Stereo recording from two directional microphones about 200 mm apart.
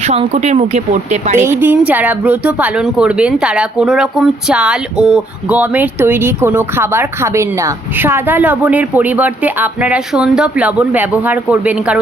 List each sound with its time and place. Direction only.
0.1 s speech: 35° right (ahead or behind)
1.5 s speech: 10° right (ahead or behind)